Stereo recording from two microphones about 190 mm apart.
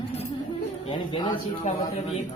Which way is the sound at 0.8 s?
25° left (ahead or behind).